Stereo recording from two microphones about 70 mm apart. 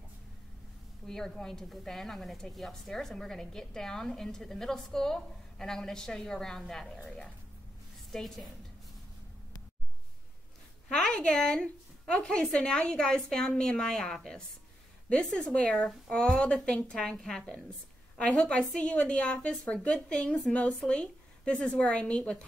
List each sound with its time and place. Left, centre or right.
1.0 s a woman's voice: centre
8.1 s a woman's voice: centre
10.9 s a woman's voice: centre